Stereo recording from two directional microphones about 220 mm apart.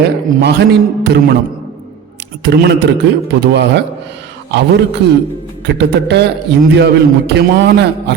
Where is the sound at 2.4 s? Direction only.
50° right (ahead or behind).